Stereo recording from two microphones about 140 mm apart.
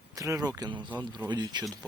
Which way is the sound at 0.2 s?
25° right (ahead or behind).